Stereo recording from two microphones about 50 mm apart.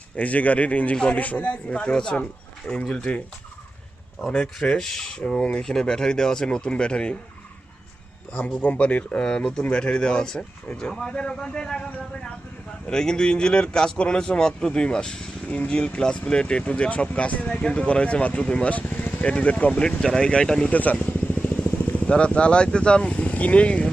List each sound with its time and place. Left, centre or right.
0.2 s speech: left
1.8 s speech: centre
4.3 s speech: centre
4.8 s speech: centre
8.3 s speech: left
12.9 s speech: centre
15.4 s speech: left
19.8 s speech: centre
20.7 s vehicle: left
22.1 s speech: left